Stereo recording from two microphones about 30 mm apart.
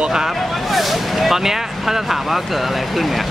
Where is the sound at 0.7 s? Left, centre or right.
Centre.